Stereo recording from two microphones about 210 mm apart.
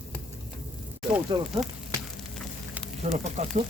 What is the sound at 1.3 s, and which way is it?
Speech, 20° right (ahead or behind).